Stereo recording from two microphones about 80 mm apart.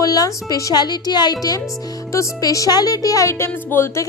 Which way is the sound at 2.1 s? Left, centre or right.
Left.